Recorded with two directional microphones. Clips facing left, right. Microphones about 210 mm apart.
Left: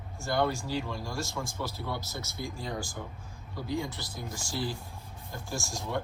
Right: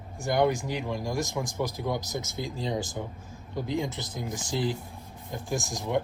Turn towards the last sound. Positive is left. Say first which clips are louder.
# right 6 dB
turn(degrees=-15)  # may be behind; listen again after turning